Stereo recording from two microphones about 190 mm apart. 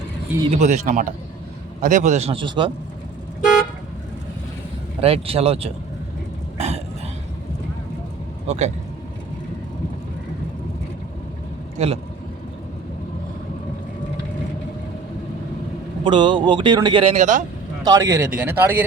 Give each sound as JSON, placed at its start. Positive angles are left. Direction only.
{"t": 0.5, "sound": "a man's voice", "side_deg": -40}
{"t": 4.9, "sound": "a man's voice", "side_deg": -30}
{"t": 8.4, "sound": "a man's voice", "side_deg": -35}
{"t": 11.8, "sound": "a man's voice", "side_deg": -35}
{"t": 16.0, "sound": "speech", "side_deg": -25}
{"t": 17.8, "sound": "speech", "side_deg": -15}